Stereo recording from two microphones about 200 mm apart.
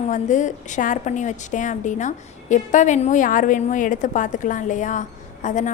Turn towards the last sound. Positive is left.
turn(degrees=40)  # may be behind; listen again after turning